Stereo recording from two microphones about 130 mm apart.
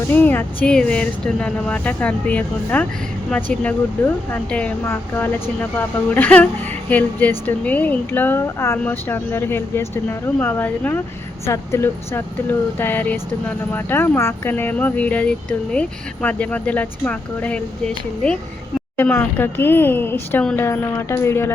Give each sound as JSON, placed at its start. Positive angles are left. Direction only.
{"t": 0.1, "sound": "speech", "side_deg": 15}
{"t": 20.4, "sound": "speech", "side_deg": 5}
{"t": 20.7, "sound": "a woman's voice", "side_deg": 20}